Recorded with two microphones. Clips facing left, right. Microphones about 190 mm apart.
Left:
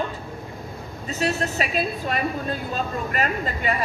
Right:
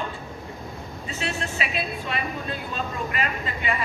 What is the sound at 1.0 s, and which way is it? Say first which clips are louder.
A woman's voice: left 6 dB; 40° left (ahead or behind).